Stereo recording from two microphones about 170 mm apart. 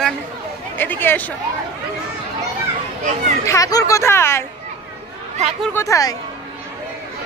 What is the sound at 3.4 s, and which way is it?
Speech, 20° left (ahead or behind).